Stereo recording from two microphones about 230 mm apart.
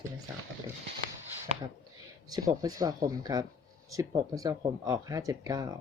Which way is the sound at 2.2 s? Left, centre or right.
Centre.